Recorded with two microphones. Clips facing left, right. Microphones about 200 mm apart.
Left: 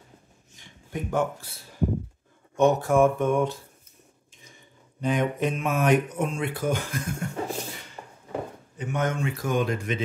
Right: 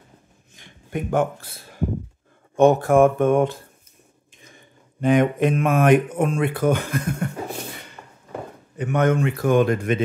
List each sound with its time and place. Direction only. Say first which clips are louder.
0.6 s speech: right 5 dB; 55° right (ahead or behind)
5.0 s speech: right 7 dB; 55° right (ahead or behind)
8.0 s a sound: left 2 dB; 20° left (ahead or behind)
8.7 s speech: right 8 dB; 60° right (ahead or behind)